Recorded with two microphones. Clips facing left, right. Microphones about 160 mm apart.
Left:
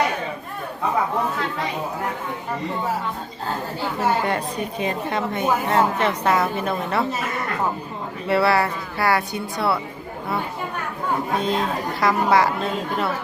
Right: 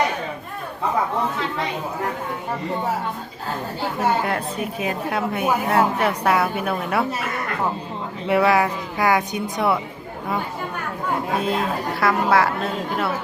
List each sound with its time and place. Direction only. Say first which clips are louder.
4.3 s a woman's voice: even; 5° right (ahead or behind)
8.3 s a woman's voice: right 1 dB; 15° right (ahead or behind)
11.3 s a woman's voice: even; 5° right (ahead or behind)